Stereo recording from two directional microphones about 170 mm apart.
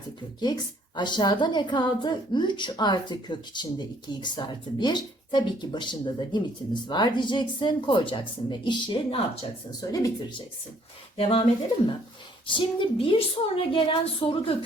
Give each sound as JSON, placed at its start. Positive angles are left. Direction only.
{"t": 0.9, "sound": "a woman's voice", "side_deg": 25}
{"t": 9.9, "sound": "a woman's voice", "side_deg": 25}
{"t": 12.5, "sound": "a woman's voice", "side_deg": 30}